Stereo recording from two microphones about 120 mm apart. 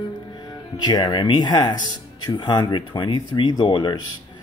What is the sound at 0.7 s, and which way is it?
Speech, 35° left (ahead or behind).